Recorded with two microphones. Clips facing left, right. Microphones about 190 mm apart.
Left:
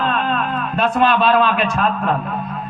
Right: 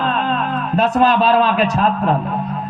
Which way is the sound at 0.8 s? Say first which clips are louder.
Right 2 dB; 40° right (ahead or behind).